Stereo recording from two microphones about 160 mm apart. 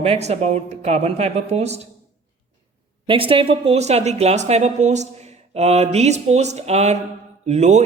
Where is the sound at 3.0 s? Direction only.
35° right (ahead or behind).